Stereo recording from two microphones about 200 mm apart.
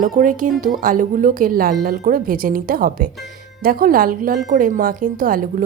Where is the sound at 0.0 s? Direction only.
40° right (ahead or behind).